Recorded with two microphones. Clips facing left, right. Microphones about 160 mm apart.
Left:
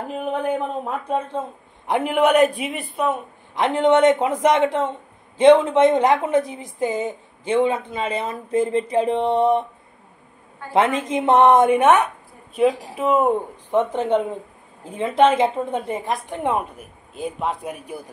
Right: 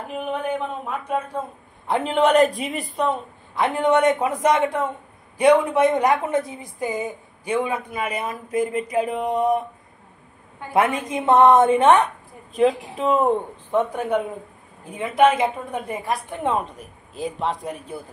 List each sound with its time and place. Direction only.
0.5 s speech: 35° left (ahead or behind)
1.9 s a man's voice: 15° left (ahead or behind)
3.5 s a woman's voice: 20° left (ahead or behind)
10.7 s a woman's voice: 25° left (ahead or behind); by 13.4 s 5° left (ahead or behind)
13.7 s a woman's voice: 20° left (ahead or behind)